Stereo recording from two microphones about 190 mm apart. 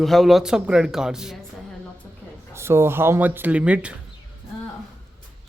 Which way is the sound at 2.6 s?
15° right (ahead or behind).